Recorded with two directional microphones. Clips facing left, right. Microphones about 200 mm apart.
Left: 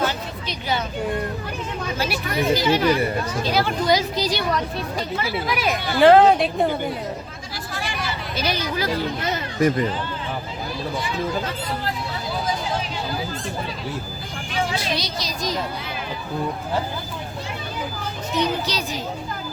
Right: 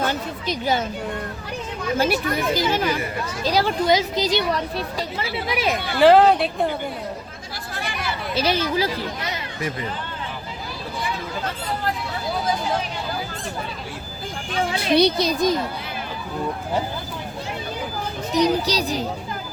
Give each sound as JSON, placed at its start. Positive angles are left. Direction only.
{"t": 0.1, "sound": "a sound", "side_deg": -45}
{"t": 2.0, "sound": "speech", "side_deg": -50}
{"t": 3.4, "sound": "speech", "side_deg": -35}
{"t": 6.0, "sound": "speech", "side_deg": 0}
{"t": 7.7, "sound": "hubbub", "side_deg": -55}
{"t": 8.4, "sound": "speech", "side_deg": -30}
{"t": 9.3, "sound": "children playing", "side_deg": 45}
{"t": 14.5, "sound": "a woman's voice", "side_deg": -60}
{"t": 18.3, "sound": "speech", "side_deg": -35}